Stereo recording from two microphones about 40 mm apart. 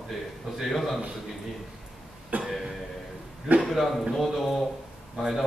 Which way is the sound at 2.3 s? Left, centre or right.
Right.